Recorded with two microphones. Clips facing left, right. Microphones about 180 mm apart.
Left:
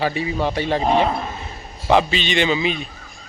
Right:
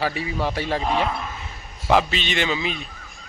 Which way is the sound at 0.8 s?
30° left (ahead or behind).